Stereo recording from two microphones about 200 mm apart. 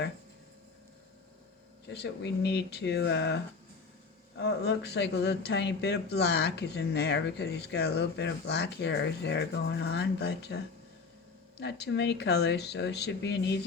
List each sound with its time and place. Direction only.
1.9 s speech: 55° left (ahead or behind)
11.6 s speech: 60° left (ahead or behind)